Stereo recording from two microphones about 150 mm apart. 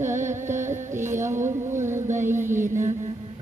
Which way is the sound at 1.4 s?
55° right (ahead or behind).